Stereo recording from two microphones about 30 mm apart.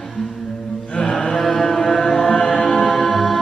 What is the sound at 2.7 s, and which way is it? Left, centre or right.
Music, centre.